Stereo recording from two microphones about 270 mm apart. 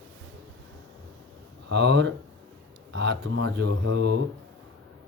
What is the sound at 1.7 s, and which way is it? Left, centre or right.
Speech, right.